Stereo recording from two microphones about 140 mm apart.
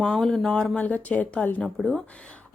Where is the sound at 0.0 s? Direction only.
5° left (ahead or behind).